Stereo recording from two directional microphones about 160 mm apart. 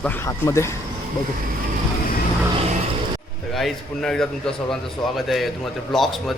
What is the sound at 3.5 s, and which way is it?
Speech, centre (ahead or behind).